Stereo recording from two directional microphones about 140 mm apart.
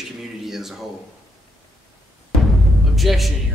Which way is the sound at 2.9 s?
Centre (ahead or behind).